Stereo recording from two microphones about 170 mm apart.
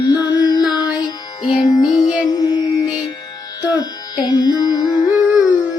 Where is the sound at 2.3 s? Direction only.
25° left (ahead or behind).